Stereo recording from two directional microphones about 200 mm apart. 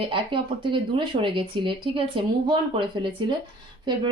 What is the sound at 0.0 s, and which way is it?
Speech, 25° right (ahead or behind).